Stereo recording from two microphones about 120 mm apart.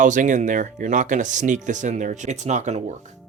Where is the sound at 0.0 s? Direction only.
90° right; by 3.0 s 75° right (ahead or behind).